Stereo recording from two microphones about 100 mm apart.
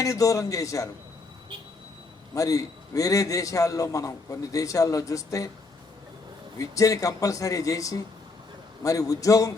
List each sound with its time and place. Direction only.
0.0 s a man's voice: 35° left (ahead or behind)
2.3 s a man's voice: 35° left (ahead or behind)
6.6 s a man's voice: 35° left (ahead or behind)